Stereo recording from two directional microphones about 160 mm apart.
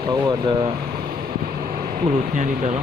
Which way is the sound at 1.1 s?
55° right (ahead or behind).